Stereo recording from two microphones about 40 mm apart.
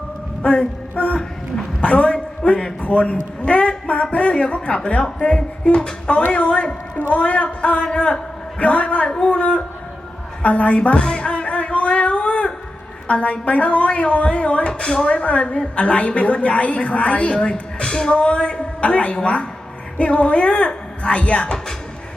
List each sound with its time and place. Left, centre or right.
0.4 s a sound: left
2.4 s a man's voice: left
14.7 s a woman's voice: left